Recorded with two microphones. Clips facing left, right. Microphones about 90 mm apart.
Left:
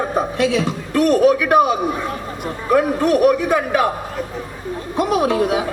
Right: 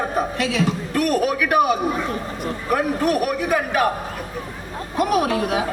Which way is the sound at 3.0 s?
30° left (ahead or behind).